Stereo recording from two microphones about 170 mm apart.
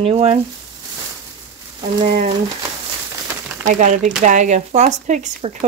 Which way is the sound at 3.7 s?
50° right (ahead or behind).